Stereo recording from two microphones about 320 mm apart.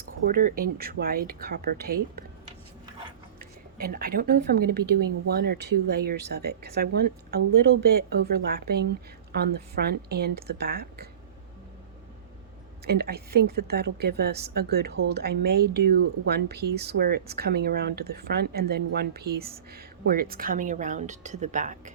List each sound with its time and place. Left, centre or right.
0.3 s speech: right
3.3 s a woman's voice: right
12.8 s speech: right